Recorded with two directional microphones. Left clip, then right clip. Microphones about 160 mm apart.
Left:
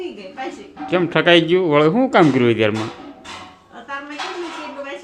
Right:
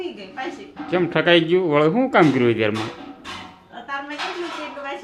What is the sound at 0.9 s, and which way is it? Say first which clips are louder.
Speech: left 3 dB; 20° left (ahead or behind).